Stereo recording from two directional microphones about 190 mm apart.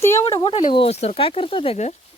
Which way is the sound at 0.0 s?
15° left (ahead or behind).